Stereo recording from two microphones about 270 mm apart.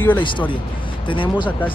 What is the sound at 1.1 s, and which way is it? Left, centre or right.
Speech, centre.